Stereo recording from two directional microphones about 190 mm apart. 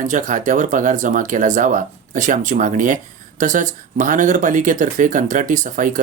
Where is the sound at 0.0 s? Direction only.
40° right (ahead or behind).